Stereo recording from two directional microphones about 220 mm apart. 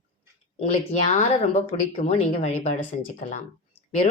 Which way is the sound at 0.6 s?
30° left (ahead or behind).